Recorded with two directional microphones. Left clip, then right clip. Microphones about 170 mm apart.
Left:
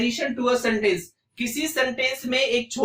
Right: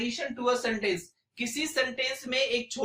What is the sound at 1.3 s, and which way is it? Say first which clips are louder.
A man's voice: left 5 dB; 15° right (ahead or behind).